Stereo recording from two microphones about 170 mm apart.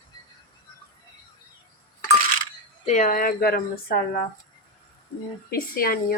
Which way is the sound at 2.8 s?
45° left (ahead or behind).